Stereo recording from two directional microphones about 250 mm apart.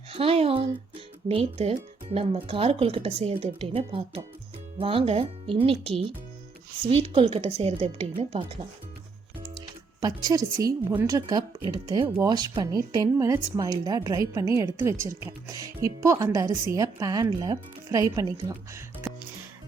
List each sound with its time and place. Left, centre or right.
0.1 s speech: right